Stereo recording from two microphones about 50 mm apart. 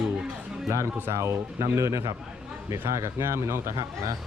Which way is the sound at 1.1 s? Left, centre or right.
Right.